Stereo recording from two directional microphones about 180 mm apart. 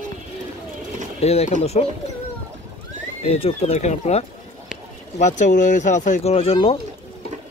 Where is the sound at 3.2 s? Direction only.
35° left (ahead or behind).